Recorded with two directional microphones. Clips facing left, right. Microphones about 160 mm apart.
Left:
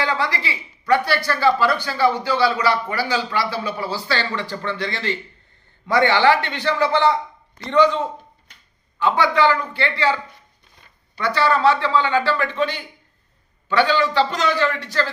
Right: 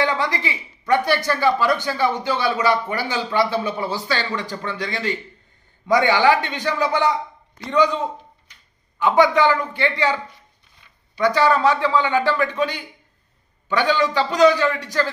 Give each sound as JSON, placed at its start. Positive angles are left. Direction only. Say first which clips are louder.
{"t": 0.0, "sound": "speech", "louder": "right 1 dB", "side_deg": -20}
{"t": 9.0, "sound": "speech", "louder": "right 2 dB", "side_deg": -15}